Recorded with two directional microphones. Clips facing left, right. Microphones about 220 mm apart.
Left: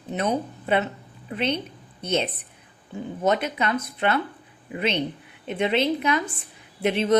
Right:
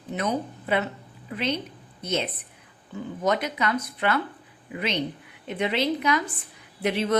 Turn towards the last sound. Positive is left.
turn(degrees=25)  # may be behind; listen again after turning